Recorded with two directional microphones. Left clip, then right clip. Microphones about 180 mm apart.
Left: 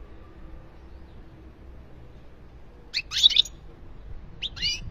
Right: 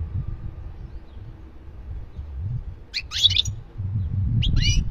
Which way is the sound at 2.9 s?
10° right (ahead or behind).